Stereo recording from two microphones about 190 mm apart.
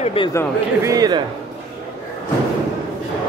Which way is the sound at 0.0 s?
30° left (ahead or behind).